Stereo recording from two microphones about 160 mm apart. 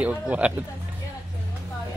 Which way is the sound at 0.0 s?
10° right (ahead or behind).